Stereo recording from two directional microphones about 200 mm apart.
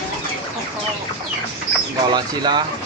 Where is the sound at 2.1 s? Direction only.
20° right (ahead or behind).